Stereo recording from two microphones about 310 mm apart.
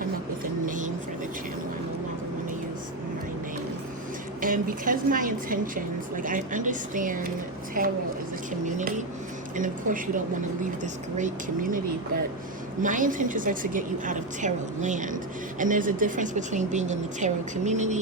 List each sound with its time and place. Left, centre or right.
0.7 s vehicle: right
4.4 s a woman's voice: right
9.6 s a woman's voice: right
12.8 s a woman's voice: right